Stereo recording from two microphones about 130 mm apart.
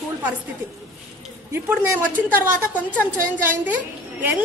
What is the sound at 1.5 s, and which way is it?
Speech, 15° right (ahead or behind).